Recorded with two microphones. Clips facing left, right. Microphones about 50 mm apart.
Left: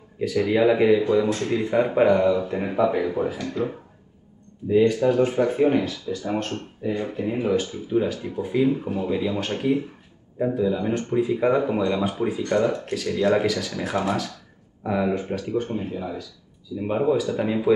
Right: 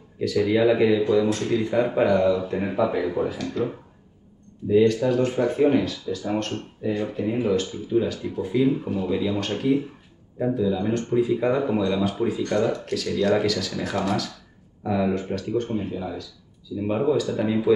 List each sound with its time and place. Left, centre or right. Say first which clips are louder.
0.2 s speech: even; centre